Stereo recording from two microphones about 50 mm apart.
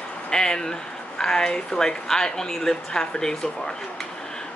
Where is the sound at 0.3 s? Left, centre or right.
Centre.